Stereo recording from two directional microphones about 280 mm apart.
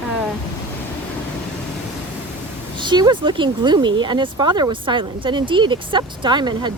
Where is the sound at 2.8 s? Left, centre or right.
Centre.